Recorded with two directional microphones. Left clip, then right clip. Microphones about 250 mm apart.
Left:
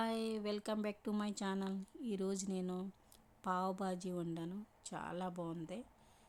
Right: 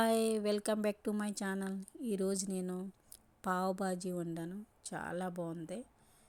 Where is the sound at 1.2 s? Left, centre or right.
Centre.